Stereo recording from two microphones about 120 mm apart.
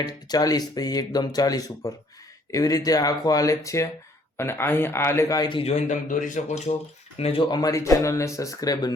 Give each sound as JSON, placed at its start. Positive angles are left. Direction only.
{"t": 0.0, "sound": "speech", "side_deg": 30}
{"t": 5.5, "sound": "a man's voice", "side_deg": 45}
{"t": 5.9, "sound": "speech", "side_deg": 90}
{"t": 7.2, "sound": "a man's voice", "side_deg": 55}
{"t": 7.4, "sound": "speech", "side_deg": 35}